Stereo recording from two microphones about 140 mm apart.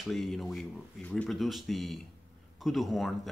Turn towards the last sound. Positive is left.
turn(degrees=0)  # may be behind; listen again after turning